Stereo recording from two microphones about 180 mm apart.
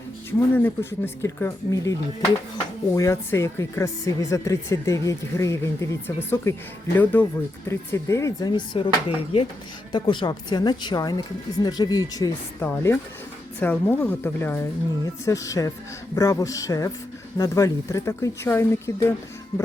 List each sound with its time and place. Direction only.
0.3 s a woman's voice: 10° left (ahead or behind)